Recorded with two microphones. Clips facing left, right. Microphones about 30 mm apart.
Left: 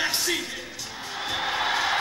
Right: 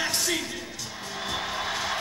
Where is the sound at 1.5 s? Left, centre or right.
Left.